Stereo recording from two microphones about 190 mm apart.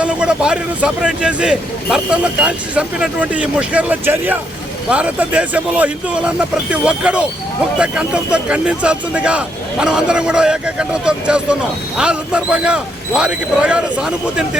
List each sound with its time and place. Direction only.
0.0 s speech: 5° right (ahead or behind)